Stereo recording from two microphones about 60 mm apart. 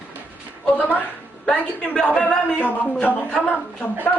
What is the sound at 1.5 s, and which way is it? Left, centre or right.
A woman's voice, centre.